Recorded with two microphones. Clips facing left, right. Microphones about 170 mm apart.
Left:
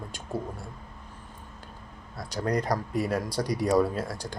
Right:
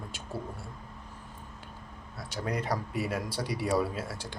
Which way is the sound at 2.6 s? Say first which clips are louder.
Left 4 dB; 40° left (ahead or behind).